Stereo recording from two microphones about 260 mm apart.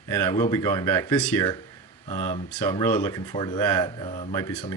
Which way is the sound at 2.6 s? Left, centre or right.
Centre.